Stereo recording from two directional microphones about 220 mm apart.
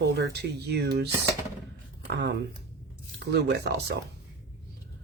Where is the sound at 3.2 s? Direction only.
50° right (ahead or behind).